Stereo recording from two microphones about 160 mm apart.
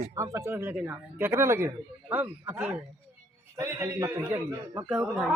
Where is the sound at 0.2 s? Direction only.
20° right (ahead or behind).